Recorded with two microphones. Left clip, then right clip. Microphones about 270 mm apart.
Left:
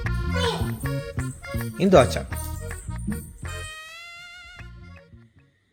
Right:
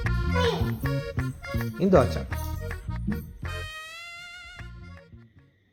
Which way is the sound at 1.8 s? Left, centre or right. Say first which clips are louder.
Left 4 dB; left.